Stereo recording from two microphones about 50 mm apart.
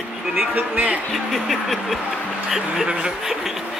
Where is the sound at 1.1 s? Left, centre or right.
Centre.